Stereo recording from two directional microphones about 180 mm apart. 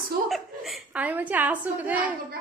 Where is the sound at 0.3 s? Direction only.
Centre (ahead or behind).